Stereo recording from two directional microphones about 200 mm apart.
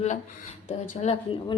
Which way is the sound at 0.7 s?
35° left (ahead or behind).